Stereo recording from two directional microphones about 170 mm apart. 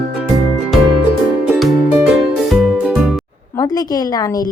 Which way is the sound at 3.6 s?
25° left (ahead or behind).